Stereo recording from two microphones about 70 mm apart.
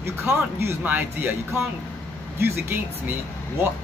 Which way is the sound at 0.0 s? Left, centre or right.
Right.